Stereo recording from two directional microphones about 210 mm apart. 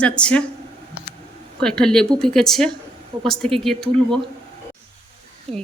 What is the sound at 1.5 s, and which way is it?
Speech, 5° left (ahead or behind).